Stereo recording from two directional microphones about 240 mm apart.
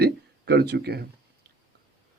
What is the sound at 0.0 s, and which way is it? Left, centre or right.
Speech, right.